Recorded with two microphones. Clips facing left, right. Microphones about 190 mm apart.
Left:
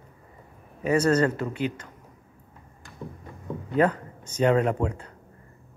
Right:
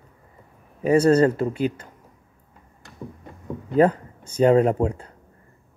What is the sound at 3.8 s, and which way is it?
Speech, 35° right (ahead or behind).